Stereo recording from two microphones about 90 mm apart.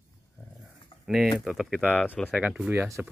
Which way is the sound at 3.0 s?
15° right (ahead or behind).